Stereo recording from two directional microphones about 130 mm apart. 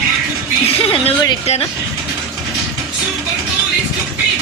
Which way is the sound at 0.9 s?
50° left (ahead or behind).